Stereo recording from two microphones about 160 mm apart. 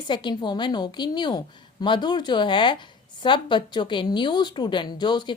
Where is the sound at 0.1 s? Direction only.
30° left (ahead or behind).